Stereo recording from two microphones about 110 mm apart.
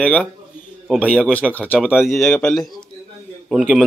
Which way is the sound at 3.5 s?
10° right (ahead or behind).